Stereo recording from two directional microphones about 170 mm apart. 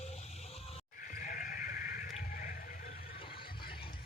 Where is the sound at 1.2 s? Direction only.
55° left (ahead or behind).